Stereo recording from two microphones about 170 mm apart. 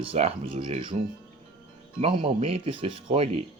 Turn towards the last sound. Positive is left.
turn(degrees=-35)  # may be behind; listen again after turning